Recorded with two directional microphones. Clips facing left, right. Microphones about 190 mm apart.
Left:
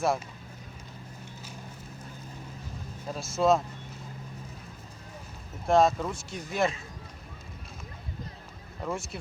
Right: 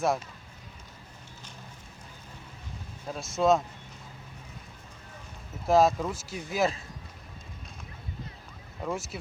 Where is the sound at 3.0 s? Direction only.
Centre (ahead or behind).